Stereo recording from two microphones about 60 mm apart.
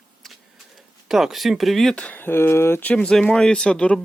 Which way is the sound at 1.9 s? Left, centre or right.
Left.